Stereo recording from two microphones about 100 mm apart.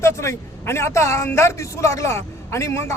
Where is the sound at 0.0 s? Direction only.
30° left (ahead or behind).